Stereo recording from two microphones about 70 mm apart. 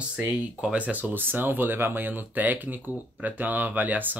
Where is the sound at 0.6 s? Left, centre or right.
Centre.